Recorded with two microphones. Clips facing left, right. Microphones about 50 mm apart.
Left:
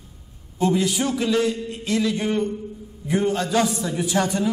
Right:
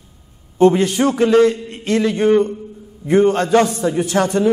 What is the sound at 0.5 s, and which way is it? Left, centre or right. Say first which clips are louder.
A man's voice: right 8 dB; right.